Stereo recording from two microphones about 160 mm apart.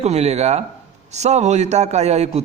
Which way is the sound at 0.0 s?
40° right (ahead or behind).